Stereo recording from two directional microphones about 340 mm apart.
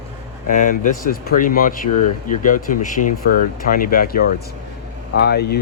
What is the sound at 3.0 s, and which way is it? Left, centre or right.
Speech, left.